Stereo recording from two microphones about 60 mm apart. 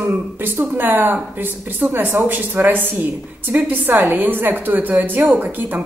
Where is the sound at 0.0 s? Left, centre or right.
Right.